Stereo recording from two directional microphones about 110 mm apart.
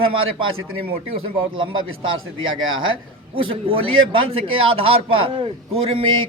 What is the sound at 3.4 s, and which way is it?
Speech, 50° right (ahead or behind).